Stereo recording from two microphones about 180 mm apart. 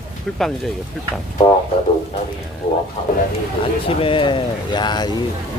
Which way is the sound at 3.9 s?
30° left (ahead or behind).